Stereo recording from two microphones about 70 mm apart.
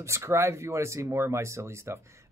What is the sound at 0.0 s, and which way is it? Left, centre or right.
Speech, right.